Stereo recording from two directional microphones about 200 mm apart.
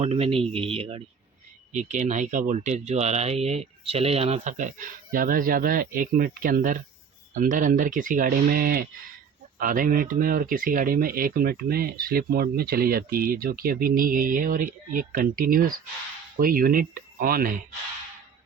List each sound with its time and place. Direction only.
0.0 s speech: 30° right (ahead or behind); by 17.6 s 45° right (ahead or behind)